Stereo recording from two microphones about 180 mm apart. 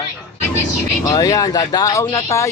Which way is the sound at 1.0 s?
20° left (ahead or behind).